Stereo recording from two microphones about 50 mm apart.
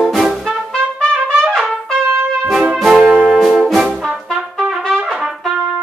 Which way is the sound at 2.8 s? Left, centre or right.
Centre.